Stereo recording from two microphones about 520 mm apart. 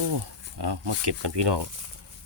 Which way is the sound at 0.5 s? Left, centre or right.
Right.